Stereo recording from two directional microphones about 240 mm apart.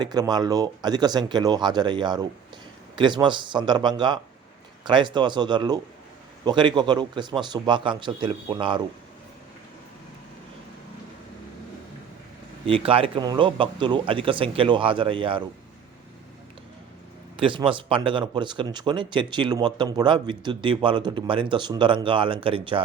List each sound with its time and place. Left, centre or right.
0.0 s speech: centre
12.6 s speech: right
17.3 s speech: right